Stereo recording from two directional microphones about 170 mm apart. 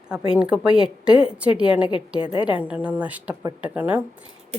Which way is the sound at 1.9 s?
30° left (ahead or behind).